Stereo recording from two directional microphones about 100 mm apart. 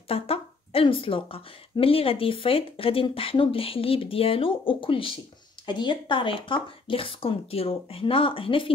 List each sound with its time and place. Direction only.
0.1 s speech: 70° left (ahead or behind)
5.7 s speech: 50° left (ahead or behind)